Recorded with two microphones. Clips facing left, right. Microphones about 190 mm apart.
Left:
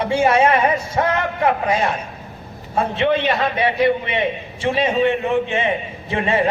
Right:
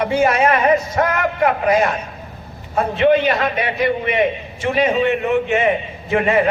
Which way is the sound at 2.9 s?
25° left (ahead or behind).